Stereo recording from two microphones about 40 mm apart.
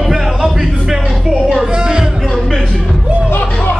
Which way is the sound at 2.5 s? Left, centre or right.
Centre.